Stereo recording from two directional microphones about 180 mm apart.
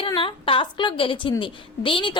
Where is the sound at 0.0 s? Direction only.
30° left (ahead or behind).